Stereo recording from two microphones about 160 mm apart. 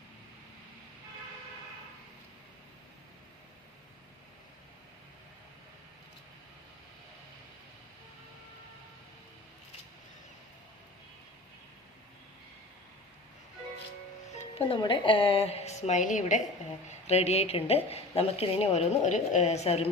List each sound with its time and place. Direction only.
14.3 s music: 40° left (ahead or behind)
14.8 s a woman's voice: 30° left (ahead or behind); by 16.4 s 50° left (ahead or behind)
17.1 s a woman's voice: 40° left (ahead or behind)